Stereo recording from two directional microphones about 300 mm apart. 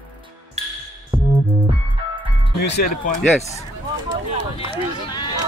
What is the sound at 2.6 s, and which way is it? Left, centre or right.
Speech, left.